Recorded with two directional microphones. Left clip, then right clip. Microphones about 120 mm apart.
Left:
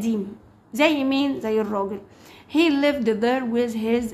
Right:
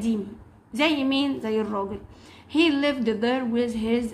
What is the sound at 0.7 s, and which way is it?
A woman's voice, 30° left (ahead or behind).